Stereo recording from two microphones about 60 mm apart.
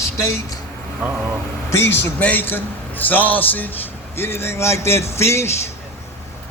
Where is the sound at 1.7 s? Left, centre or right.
Left.